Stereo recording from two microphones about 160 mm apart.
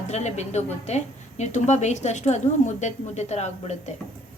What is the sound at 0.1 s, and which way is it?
A woman's voice, 45° left (ahead or behind).